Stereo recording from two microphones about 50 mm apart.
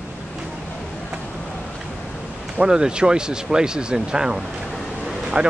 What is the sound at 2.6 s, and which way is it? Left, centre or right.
Speech, centre.